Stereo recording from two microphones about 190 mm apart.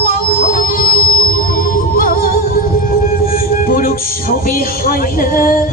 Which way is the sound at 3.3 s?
50° left (ahead or behind).